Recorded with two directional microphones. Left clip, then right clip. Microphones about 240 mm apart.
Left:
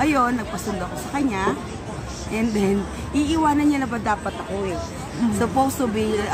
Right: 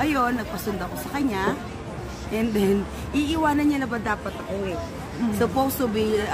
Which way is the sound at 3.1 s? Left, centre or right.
Centre.